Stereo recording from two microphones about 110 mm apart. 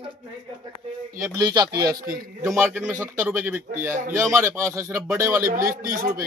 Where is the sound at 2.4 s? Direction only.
25° right (ahead or behind).